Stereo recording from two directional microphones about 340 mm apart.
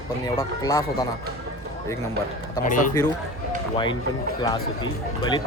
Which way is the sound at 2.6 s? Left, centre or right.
Left.